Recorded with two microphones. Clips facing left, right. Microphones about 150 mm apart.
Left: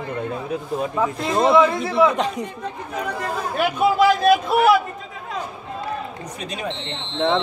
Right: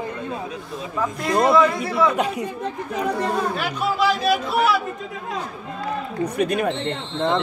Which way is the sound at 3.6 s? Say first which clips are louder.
Left 5 dB; 50° left (ahead or behind).